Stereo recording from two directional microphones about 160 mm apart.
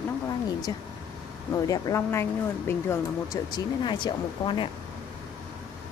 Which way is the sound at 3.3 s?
30° left (ahead or behind).